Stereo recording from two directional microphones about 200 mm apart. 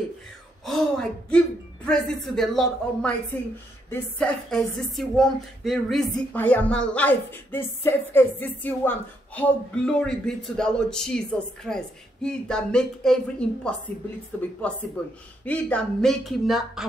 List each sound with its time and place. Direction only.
0.7 s speech: centre (ahead or behind)